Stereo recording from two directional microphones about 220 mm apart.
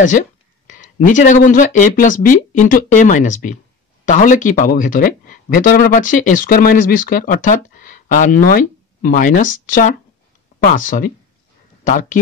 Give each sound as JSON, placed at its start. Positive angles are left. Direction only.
{"t": 0.7, "sound": "speech", "side_deg": 35}